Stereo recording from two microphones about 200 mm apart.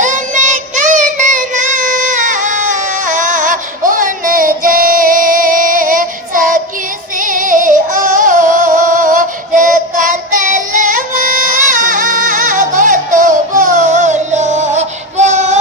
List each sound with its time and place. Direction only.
0.0 s child singing: 40° right (ahead or behind)
7.2 s music: 40° right (ahead or behind)